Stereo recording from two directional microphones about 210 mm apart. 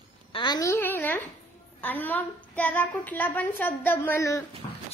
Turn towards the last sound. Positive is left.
turn(degrees=35)  # may be behind; listen again after turning